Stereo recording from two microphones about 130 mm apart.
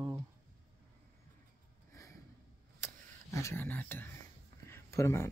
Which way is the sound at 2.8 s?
20° left (ahead or behind).